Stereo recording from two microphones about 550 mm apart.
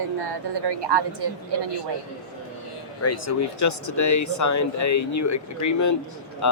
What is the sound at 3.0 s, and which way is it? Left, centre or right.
A man's voice, left.